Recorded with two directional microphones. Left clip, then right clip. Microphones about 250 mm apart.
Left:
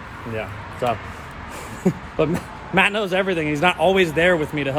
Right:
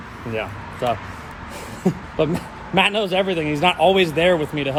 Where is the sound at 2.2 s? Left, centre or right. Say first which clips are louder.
Even; centre.